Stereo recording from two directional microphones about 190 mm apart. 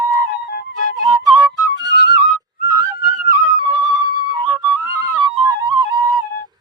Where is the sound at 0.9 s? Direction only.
20° right (ahead or behind).